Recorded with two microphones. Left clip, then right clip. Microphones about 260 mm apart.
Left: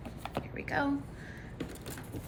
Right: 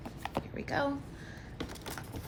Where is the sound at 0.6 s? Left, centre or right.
Right.